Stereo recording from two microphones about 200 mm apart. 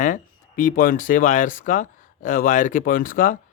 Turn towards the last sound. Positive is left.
turn(degrees=40)  # may be behind; listen again after turning